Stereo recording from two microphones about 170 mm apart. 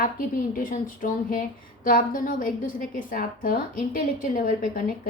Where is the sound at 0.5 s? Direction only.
50° left (ahead or behind).